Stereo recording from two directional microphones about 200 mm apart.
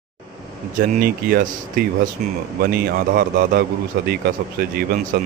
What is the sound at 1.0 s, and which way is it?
A man's voice, 45° right (ahead or behind).